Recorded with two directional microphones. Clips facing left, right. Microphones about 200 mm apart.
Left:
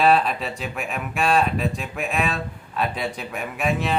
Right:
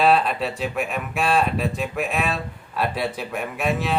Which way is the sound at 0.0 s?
Centre (ahead or behind).